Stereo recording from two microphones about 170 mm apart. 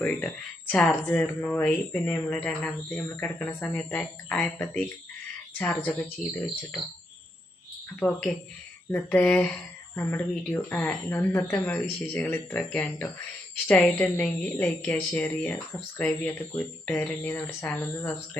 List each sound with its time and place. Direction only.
0.7 s speech: 5° left (ahead or behind)
7.9 s speech: 5° left (ahead or behind)